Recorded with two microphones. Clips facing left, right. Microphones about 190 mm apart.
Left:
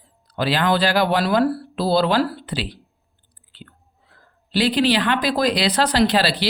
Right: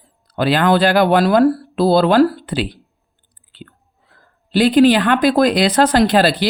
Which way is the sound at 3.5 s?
55° right (ahead or behind).